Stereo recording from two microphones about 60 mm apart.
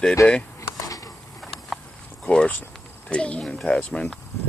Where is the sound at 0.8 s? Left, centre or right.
Left.